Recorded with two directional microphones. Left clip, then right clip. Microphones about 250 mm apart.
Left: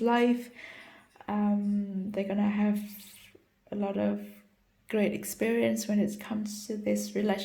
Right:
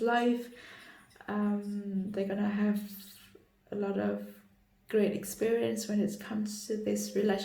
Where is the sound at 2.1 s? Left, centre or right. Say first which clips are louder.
Left 3 dB; left.